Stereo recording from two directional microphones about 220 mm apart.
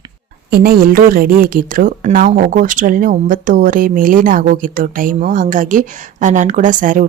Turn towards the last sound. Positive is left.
turn(degrees=-35)  # may be behind; listen again after turning